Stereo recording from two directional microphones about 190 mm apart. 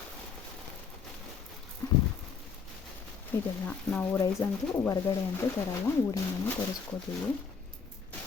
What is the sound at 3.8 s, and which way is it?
Speech, 10° left (ahead or behind).